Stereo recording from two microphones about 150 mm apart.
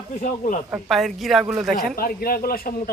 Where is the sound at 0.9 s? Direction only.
Centre (ahead or behind).